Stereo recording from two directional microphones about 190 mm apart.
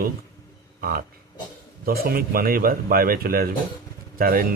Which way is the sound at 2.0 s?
50° right (ahead or behind).